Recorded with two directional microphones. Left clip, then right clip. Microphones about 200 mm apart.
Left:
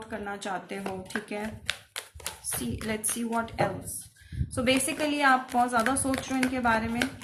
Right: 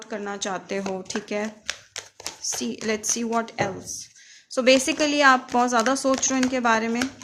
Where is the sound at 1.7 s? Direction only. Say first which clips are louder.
Right 1 dB; 15° right (ahead or behind).